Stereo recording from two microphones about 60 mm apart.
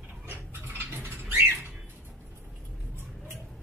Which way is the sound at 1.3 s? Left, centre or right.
Right.